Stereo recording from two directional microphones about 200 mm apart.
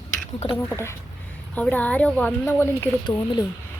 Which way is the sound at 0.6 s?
10° left (ahead or behind).